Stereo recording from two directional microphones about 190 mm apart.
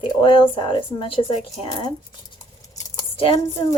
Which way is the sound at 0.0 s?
25° left (ahead or behind).